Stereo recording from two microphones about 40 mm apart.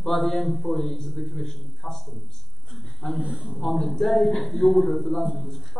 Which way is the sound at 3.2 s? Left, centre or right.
Right.